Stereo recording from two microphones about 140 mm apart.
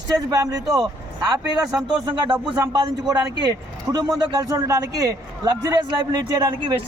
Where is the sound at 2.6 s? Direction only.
25° right (ahead or behind).